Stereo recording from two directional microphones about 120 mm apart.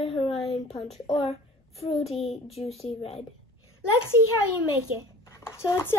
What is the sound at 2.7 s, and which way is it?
Speech, 55° left (ahead or behind).